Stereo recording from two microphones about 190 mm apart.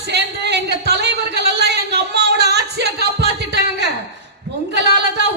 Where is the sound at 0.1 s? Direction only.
60° right (ahead or behind).